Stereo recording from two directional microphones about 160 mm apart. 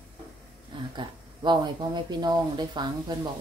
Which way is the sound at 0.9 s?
30° right (ahead or behind).